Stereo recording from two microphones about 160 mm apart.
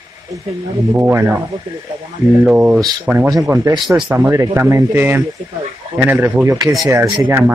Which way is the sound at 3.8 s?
5° right (ahead or behind).